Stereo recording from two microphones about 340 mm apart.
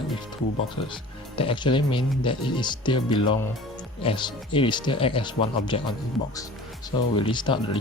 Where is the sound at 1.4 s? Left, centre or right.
Centre.